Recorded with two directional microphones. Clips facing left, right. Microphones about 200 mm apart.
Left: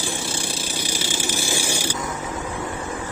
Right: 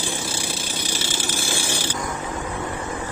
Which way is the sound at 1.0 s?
15° left (ahead or behind).